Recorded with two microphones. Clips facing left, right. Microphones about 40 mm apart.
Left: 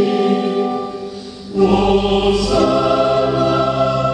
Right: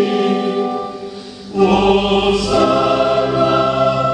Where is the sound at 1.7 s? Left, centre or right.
Right.